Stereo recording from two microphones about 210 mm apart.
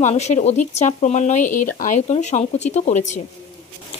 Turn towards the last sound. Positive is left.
turn(degrees=35)  # may be behind; listen again after turning